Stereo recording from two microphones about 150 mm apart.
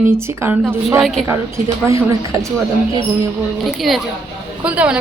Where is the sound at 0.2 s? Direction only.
15° right (ahead or behind).